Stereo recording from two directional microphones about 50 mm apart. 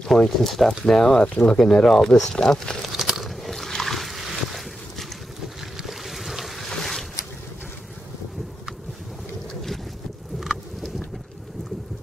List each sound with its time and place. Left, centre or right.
0.0 s speech: centre
2.8 s boat: centre
10.4 s a sound: centre